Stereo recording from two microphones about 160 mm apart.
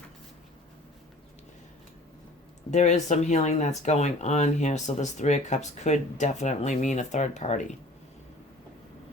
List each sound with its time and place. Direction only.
2.6 s speech: 45° left (ahead or behind)